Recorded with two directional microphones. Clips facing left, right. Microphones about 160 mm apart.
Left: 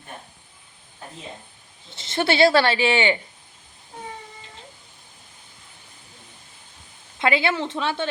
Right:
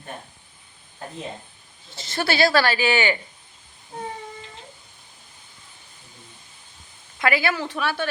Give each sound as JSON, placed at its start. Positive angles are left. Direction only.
{"t": 1.9, "sound": "a woman's voice", "side_deg": 20}
{"t": 7.2, "sound": "a woman's voice", "side_deg": 25}